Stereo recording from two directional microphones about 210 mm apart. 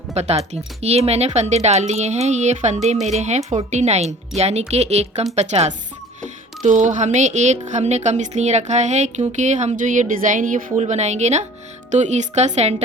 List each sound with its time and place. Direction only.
0.1 s a woman's voice: 30° right (ahead or behind)